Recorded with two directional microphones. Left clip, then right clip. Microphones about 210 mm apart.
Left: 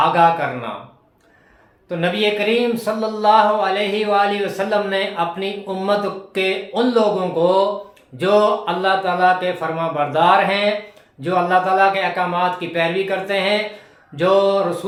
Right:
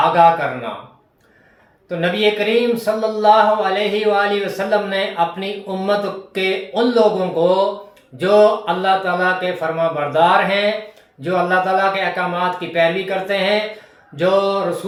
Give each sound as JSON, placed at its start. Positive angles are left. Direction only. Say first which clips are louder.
{"t": 0.0, "sound": "speech", "louder": "right 2 dB", "side_deg": 15}
{"t": 1.9, "sound": "speech", "louder": "right 2 dB", "side_deg": 15}